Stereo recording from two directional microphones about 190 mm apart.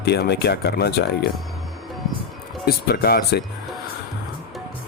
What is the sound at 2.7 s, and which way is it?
Speech, 55° left (ahead or behind).